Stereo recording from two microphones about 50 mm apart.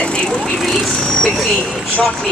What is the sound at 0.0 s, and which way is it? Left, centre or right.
Vehicle, centre.